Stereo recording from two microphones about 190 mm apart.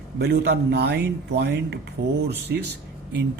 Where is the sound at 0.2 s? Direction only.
60° right (ahead or behind).